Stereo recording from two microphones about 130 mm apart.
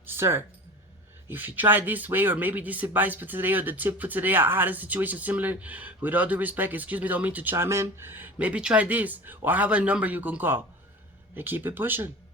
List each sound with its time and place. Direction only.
0.0 s speech: 20° right (ahead or behind)